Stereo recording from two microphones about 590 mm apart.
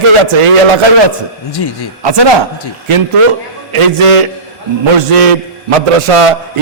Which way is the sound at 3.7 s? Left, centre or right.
Right.